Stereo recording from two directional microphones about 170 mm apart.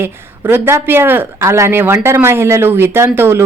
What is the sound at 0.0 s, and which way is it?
A woman's voice, 15° right (ahead or behind).